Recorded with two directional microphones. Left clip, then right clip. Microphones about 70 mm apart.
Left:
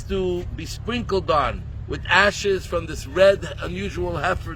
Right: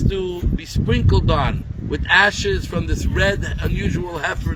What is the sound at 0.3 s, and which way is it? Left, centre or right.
Speech, left.